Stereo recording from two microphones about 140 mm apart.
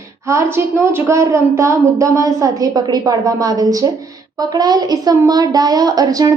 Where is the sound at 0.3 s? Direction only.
20° right (ahead or behind).